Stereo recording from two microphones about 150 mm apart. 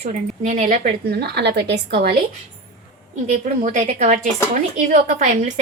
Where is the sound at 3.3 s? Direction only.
55° right (ahead or behind).